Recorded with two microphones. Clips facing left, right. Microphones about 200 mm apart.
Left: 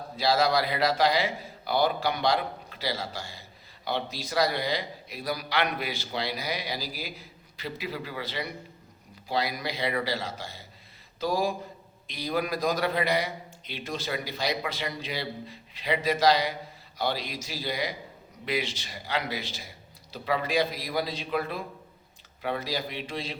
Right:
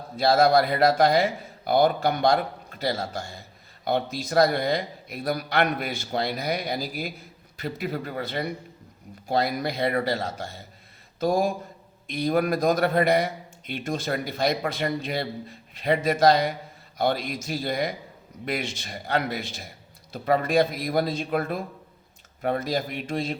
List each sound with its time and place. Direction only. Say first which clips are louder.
0.2 s a man's voice: right 5 dB; 50° right (ahead or behind)